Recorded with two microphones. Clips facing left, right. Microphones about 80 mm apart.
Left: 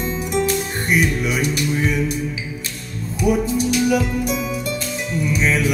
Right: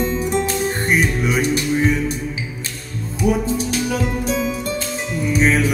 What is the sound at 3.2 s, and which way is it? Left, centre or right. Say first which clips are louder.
Music: left 1 dB; right.